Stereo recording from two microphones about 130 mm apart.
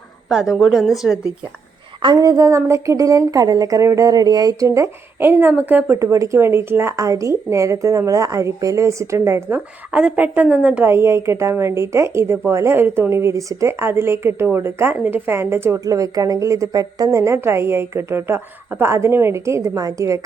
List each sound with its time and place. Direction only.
0.3 s a woman's voice: 5° right (ahead or behind)
2.0 s a woman's voice: 40° right (ahead or behind)
2.2 s speech: 25° right (ahead or behind)